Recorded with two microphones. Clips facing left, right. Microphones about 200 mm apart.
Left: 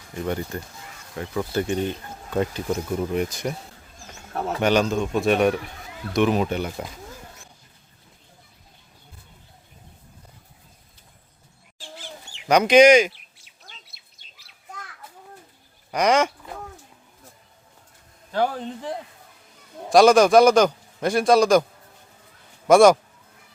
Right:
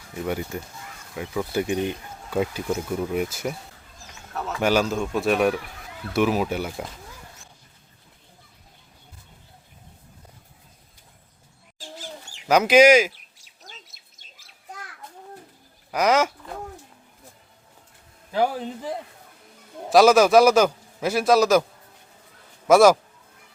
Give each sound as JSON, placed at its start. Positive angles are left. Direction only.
{"t": 0.1, "sound": "a man's voice", "side_deg": -5}
{"t": 4.4, "sound": "a man's voice", "side_deg": 35}
{"t": 4.6, "sound": "speech", "side_deg": -5}
{"t": 11.8, "sound": "chicken", "side_deg": -40}
{"t": 12.5, "sound": "speech", "side_deg": -5}
{"t": 13.1, "sound": "chirp", "side_deg": -40}
{"t": 15.9, "sound": "speech", "side_deg": -5}
{"t": 18.3, "sound": "a man's voice", "side_deg": -10}
{"t": 22.6, "sound": "speech", "side_deg": -5}